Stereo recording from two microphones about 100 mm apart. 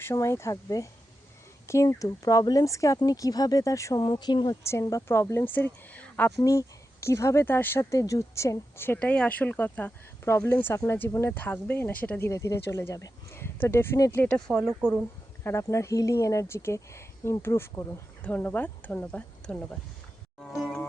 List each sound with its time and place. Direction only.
0.0 s speech: 30° left (ahead or behind)
4.0 s speech: 45° left (ahead or behind)
4.6 s speech: 30° left (ahead or behind)
6.4 s speech: 30° left (ahead or behind)
10.2 s speech: 30° left (ahead or behind)
12.3 s speech: 30° left (ahead or behind)
14.2 s speech: 10° left (ahead or behind)
14.8 s speech: 15° right (ahead or behind)
15.4 s speech: 30° left (ahead or behind)
18.2 s speech: 15° left (ahead or behind)